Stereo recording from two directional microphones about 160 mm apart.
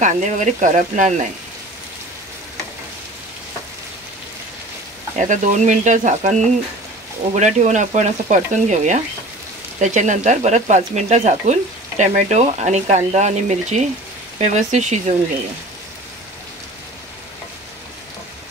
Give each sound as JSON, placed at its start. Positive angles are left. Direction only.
{"t": 0.0, "sound": "speech", "side_deg": -50}
{"t": 5.2, "sound": "speech", "side_deg": -50}